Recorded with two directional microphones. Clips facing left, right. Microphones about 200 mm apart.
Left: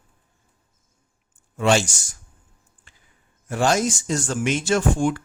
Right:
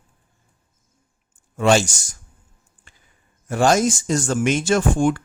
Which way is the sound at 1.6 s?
40° right (ahead or behind).